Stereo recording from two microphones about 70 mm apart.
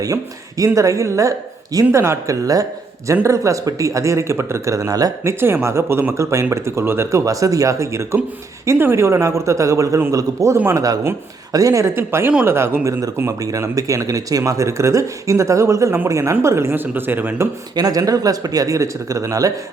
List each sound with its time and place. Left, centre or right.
0.0 s speech: right
5.2 s speech: right
7.3 s speech: right
10.8 s speech: right
11.9 s speech: right
13.4 s speech: right
17.7 s speech: right